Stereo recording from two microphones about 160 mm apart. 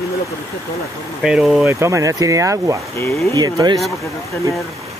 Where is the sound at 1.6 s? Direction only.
15° right (ahead or behind).